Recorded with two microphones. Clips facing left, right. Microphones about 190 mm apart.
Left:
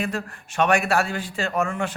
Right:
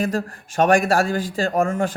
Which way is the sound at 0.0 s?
35° right (ahead or behind).